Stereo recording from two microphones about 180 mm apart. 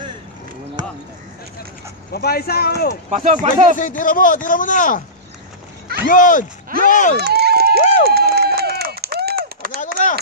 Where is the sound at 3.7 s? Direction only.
45° left (ahead or behind).